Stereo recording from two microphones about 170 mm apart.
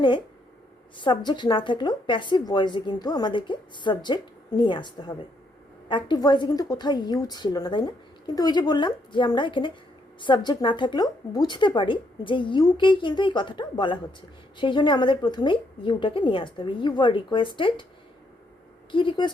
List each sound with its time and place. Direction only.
0.9 s a woman's voice: 30° left (ahead or behind)
18.9 s a woman's voice: 30° left (ahead or behind)